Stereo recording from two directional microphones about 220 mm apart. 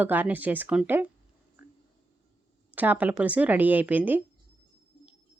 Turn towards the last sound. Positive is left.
turn(degrees=-5)  # may be behind; listen again after turning